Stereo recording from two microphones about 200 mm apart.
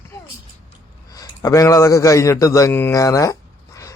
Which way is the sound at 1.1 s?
15° left (ahead or behind).